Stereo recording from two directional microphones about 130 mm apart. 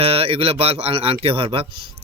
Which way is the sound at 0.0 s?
45° right (ahead or behind).